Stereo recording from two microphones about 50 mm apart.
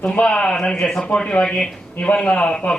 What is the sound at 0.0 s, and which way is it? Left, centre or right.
A man's voice, left.